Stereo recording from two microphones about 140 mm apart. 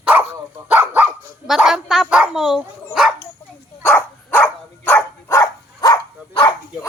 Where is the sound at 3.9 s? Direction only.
10° left (ahead or behind); by 6.8 s 25° left (ahead or behind).